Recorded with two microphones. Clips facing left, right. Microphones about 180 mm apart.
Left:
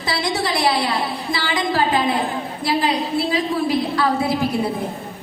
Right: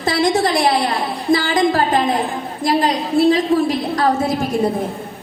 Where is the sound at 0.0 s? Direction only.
45° right (ahead or behind).